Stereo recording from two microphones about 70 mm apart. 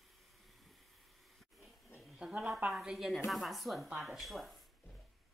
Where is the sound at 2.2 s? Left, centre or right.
Centre.